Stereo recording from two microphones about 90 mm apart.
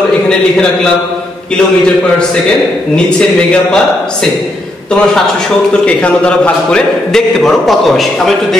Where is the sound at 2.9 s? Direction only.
10° left (ahead or behind).